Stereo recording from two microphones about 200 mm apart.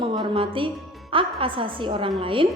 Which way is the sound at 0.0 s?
25° right (ahead or behind).